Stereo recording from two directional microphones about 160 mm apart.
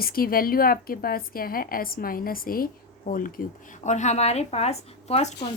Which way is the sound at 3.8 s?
45° left (ahead or behind).